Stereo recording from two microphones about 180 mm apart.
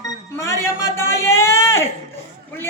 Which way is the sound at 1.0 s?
15° left (ahead or behind).